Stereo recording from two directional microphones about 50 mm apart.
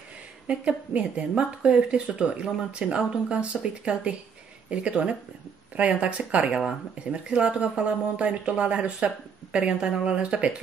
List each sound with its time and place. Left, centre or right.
0.5 s speech: right